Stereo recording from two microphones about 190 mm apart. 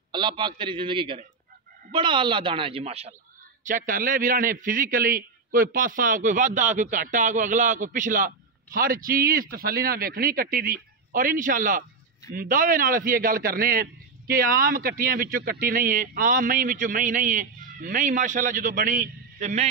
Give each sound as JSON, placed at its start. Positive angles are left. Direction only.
{"t": 0.1, "sound": "a woman's voice", "side_deg": -25}
{"t": 3.6, "sound": "a man's voice", "side_deg": -45}